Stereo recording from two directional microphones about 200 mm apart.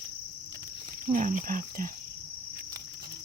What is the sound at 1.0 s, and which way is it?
Speech, 40° right (ahead or behind).